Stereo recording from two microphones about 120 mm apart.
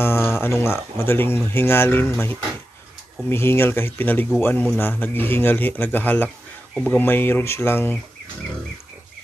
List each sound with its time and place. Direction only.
0.0 s speech: 20° left (ahead or behind)